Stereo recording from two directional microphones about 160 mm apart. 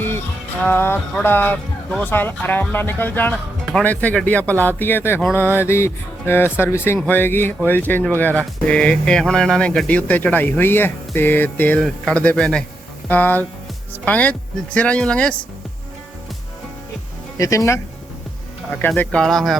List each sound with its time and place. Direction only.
0.6 s a man's voice: 15° left (ahead or behind)
17.3 s speech: 20° left (ahead or behind)
18.8 s a man's voice: 10° left (ahead or behind)